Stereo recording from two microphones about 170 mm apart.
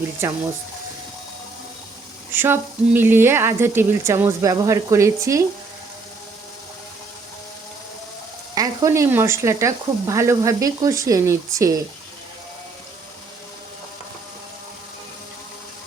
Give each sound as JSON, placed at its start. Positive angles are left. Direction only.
{"t": 2.3, "sound": "speech", "side_deg": -10}
{"t": 8.5, "sound": "speech", "side_deg": -20}